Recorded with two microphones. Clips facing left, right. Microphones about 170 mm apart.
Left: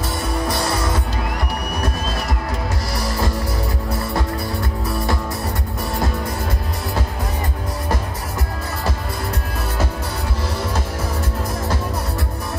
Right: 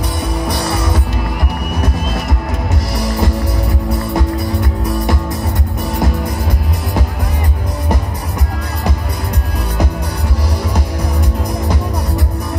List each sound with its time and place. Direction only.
0.5 s music: 20° right (ahead or behind)
2.9 s music: 20° right (ahead or behind)